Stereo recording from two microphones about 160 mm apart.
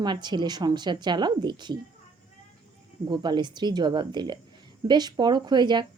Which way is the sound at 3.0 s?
25° right (ahead or behind).